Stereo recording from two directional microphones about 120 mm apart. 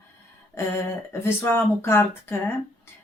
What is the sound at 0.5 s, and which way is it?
Speech, 20° left (ahead or behind).